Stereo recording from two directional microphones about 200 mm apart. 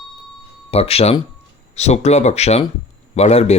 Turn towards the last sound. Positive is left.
turn(degrees=30)  # may be behind; listen again after turning